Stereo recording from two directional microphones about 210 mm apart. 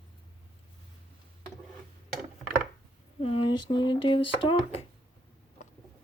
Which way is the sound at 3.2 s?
25° left (ahead or behind).